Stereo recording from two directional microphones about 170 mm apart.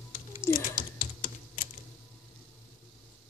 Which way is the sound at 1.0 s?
55° left (ahead or behind).